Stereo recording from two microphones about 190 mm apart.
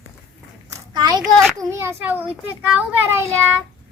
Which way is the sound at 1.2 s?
Centre (ahead or behind).